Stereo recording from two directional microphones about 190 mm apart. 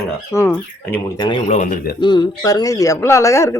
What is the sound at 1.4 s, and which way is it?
Speech, 40° left (ahead or behind).